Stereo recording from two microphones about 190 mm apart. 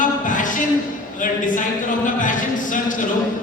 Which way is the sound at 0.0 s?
45° left (ahead or behind).